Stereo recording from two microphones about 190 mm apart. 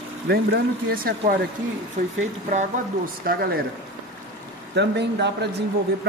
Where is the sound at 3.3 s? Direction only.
50° right (ahead or behind).